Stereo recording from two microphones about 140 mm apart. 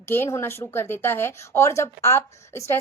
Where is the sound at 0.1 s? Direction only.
20° left (ahead or behind).